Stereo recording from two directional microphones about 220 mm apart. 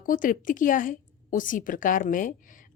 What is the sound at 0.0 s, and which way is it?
A woman's voice, 40° left (ahead or behind).